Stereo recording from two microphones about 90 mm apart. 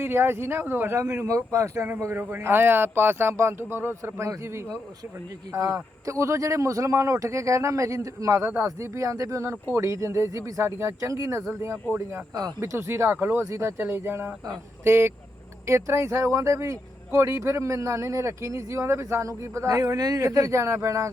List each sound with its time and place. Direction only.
0.0 s a man's voice: 25° right (ahead or behind)
12.3 s speech: 50° right (ahead or behind)
12.5 s a man's voice: 30° right (ahead or behind)